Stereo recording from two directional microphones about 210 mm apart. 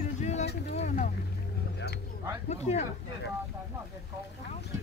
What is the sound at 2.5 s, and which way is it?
Speech, 30° left (ahead or behind).